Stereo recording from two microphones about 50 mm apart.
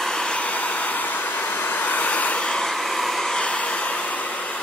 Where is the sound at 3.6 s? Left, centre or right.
Left.